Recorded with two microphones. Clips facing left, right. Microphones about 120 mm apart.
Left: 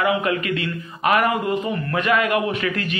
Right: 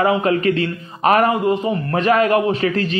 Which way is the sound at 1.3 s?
25° right (ahead or behind).